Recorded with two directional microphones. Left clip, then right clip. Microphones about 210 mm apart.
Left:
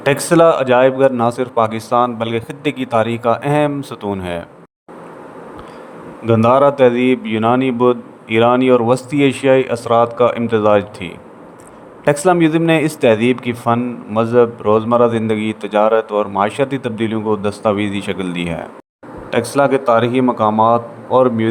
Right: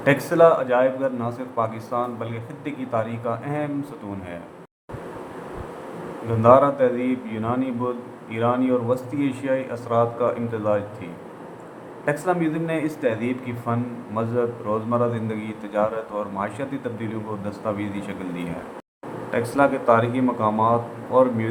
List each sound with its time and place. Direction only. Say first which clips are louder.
0.0 s a man's voice: left 5 dB; 40° left (ahead or behind)
6.2 s a man's voice: left 4 dB; 45° left (ahead or behind)